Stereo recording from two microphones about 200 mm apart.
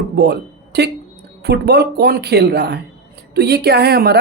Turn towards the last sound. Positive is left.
turn(degrees=-50)  # may be behind; listen again after turning